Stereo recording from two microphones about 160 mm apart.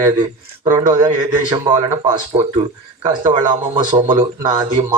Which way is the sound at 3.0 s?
30° right (ahead or behind).